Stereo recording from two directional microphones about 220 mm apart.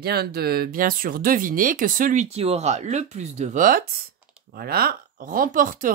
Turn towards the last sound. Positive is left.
turn(degrees=-35)  # may be behind; listen again after turning